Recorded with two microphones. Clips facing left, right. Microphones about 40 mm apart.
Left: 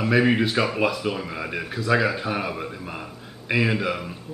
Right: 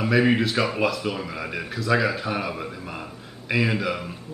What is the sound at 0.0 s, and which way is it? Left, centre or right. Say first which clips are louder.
Speech: even; centre.